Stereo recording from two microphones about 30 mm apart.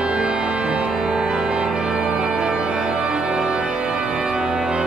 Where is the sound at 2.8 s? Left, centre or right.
Right.